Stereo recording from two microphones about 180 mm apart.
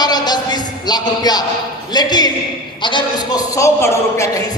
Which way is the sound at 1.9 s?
25° left (ahead or behind).